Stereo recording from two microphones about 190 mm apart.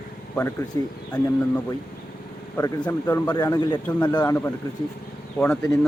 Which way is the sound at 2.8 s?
15° left (ahead or behind).